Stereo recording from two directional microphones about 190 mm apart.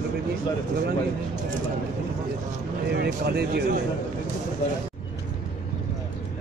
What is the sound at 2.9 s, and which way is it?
Speech, 60° right (ahead or behind).